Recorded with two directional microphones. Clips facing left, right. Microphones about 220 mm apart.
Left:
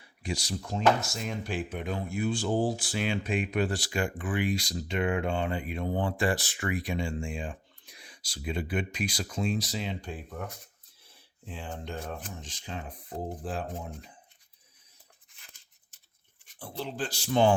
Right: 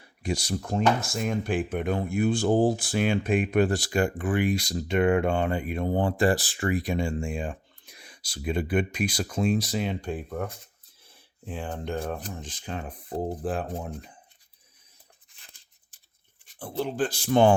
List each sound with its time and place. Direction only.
0.0 s speech: 45° right (ahead or behind)
13.1 s speech: 35° right (ahead or behind)
13.4 s speech: 55° right (ahead or behind)
16.6 s speech: 50° right (ahead or behind)